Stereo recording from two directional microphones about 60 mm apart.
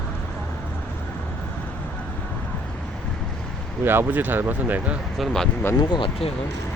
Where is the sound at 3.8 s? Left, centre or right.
Right.